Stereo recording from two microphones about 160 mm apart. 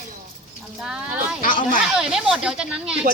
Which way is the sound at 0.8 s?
5° right (ahead or behind).